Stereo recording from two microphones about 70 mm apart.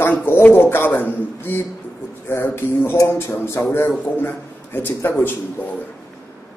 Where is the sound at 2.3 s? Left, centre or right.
Left.